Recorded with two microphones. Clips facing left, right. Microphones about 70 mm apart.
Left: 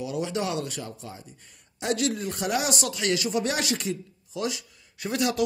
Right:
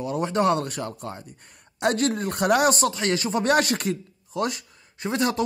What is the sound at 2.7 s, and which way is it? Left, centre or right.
A man's voice, right.